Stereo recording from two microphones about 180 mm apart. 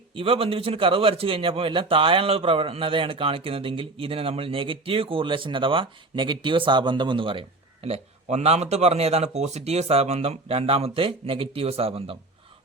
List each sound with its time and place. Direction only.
0.1 s a man's voice: 30° right (ahead or behind)